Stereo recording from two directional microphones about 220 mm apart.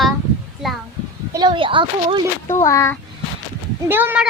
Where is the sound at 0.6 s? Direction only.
Centre (ahead or behind).